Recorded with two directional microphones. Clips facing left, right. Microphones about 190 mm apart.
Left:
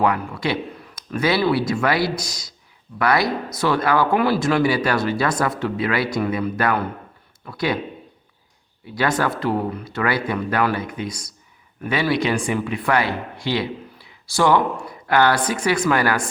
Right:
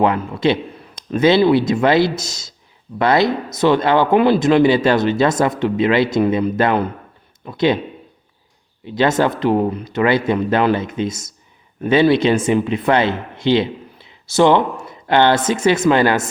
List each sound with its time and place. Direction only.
0.0 s speech: 20° right (ahead or behind)
8.9 s speech: 25° right (ahead or behind)